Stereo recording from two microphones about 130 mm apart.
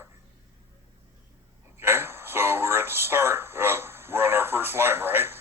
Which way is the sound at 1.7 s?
20° right (ahead or behind).